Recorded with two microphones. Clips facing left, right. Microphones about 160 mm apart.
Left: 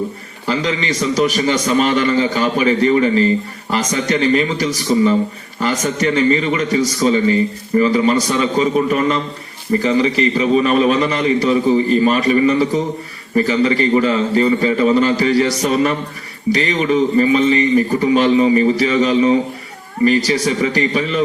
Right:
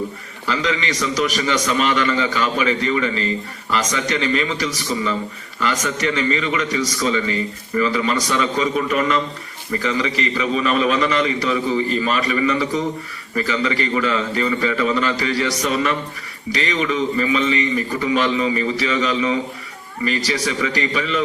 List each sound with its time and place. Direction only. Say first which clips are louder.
0.4 s a man's voice: left 3 dB; 35° left (ahead or behind)